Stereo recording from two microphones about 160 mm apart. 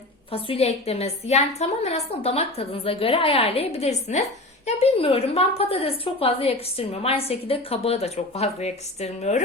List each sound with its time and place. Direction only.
0.3 s a woman's voice: 35° left (ahead or behind)